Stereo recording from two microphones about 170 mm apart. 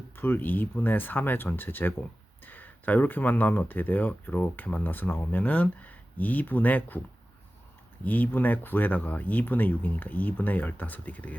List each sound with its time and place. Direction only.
0.2 s speech: 10° left (ahead or behind)
8.0 s speech: 10° left (ahead or behind)